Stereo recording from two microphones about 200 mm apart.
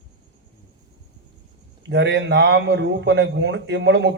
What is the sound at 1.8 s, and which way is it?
A man's voice, 60° right (ahead or behind).